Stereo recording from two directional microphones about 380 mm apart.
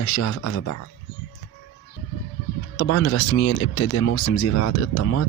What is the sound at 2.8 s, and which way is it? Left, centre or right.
Speech, left.